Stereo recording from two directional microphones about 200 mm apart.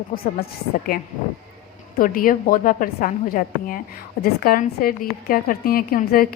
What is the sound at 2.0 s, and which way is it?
A woman's voice, 45° left (ahead or behind).